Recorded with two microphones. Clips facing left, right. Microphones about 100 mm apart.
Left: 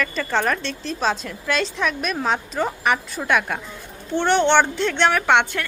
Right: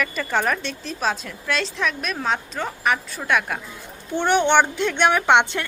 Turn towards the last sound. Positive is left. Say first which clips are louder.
# right 1 dB
turn(degrees=-20)  # may be behind; listen again after turning